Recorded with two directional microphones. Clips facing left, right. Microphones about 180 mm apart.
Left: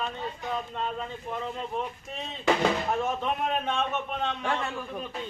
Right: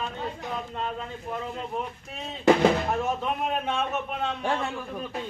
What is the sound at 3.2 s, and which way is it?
A man's voice, 5° right (ahead or behind).